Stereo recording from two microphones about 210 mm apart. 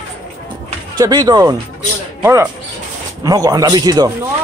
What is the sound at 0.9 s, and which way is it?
Speech, 20° right (ahead or behind).